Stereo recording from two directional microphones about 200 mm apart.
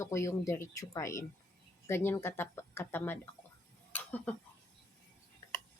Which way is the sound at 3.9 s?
10° left (ahead or behind).